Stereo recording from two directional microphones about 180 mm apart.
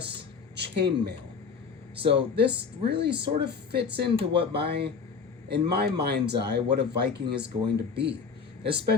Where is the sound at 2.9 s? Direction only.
65° right (ahead or behind).